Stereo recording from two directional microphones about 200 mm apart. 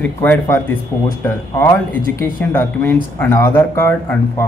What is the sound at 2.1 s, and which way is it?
Speech, 10° left (ahead or behind).